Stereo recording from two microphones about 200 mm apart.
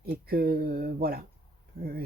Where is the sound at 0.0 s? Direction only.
45° right (ahead or behind).